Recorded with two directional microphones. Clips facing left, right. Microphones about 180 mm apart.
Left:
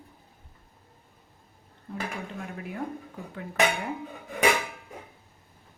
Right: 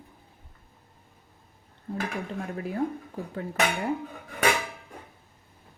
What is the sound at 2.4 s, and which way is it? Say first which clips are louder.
Speech: right 5 dB; 35° right (ahead or behind).